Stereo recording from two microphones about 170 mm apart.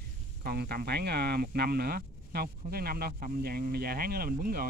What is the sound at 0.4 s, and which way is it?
Speech, 65° right (ahead or behind).